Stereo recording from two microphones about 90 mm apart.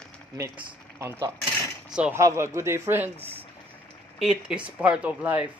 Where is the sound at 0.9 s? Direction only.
30° right (ahead or behind).